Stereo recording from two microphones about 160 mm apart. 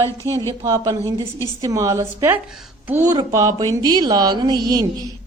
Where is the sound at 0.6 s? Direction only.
20° right (ahead or behind).